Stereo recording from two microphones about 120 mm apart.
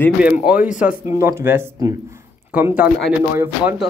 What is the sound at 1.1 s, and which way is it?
Speech, 20° right (ahead or behind).